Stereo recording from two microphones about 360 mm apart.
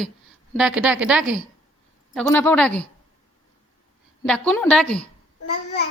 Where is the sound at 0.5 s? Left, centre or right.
Centre.